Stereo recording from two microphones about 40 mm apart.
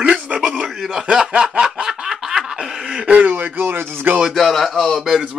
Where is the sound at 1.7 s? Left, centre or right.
Centre.